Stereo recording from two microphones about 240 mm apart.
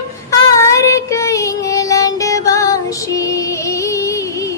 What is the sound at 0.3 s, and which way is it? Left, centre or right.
Child singing, centre.